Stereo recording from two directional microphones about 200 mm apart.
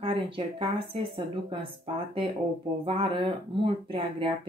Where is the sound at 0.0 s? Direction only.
25° right (ahead or behind).